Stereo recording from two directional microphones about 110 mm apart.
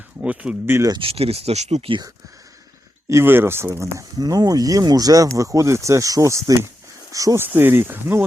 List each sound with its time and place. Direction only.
0.2 s speech: 15° right (ahead or behind)
0.9 s speech: 55° right (ahead or behind); by 1.9 s 85° right
3.1 s speech: 20° right (ahead or behind)
7.4 s speech: 20° right (ahead or behind)